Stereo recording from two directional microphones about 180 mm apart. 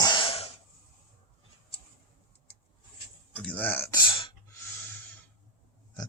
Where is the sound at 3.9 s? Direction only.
25° left (ahead or behind).